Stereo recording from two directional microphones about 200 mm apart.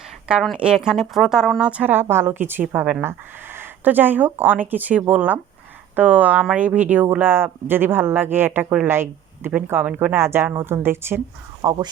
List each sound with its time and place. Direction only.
0.3 s speech: 5° right (ahead or behind)